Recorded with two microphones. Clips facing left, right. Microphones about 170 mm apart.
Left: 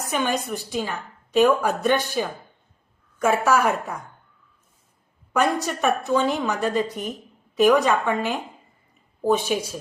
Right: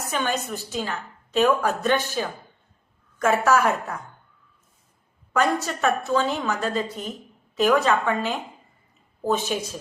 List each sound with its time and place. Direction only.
0.1 s a woman's voice: 10° left (ahead or behind)
5.3 s a woman's voice: 15° left (ahead or behind)